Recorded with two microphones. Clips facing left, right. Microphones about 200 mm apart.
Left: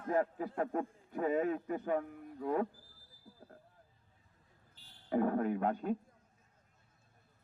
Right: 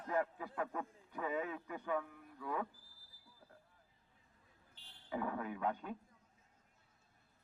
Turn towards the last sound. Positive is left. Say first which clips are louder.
# left 7 dB
turn(degrees=45)  # may be behind; listen again after turning